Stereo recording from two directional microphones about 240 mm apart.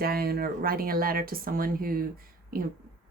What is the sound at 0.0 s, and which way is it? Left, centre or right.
Speech, right.